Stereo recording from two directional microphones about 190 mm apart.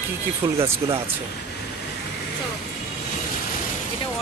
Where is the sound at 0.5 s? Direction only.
30° right (ahead or behind).